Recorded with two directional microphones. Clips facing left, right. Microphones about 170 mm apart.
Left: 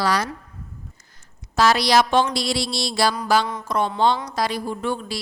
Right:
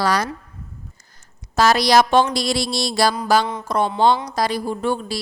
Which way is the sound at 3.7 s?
35° right (ahead or behind).